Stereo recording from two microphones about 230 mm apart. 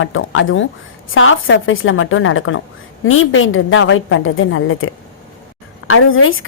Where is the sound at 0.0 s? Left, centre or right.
Left.